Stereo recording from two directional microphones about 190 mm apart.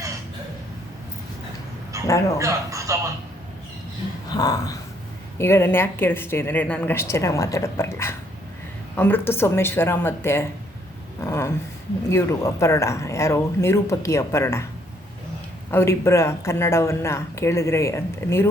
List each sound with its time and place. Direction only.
1.9 s a sound: 15° right (ahead or behind)
2.4 s speech: 15° right (ahead or behind)
4.4 s a woman's voice: 20° left (ahead or behind)
15.7 s a woman's voice: 15° left (ahead or behind)